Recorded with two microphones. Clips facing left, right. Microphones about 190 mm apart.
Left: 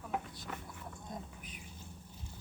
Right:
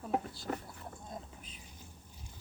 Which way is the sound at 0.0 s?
30° right (ahead or behind).